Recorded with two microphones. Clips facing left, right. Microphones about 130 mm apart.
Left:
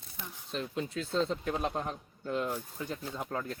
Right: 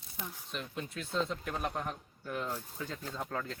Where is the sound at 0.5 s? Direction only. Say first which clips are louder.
Left 7 dB; 30° left (ahead or behind).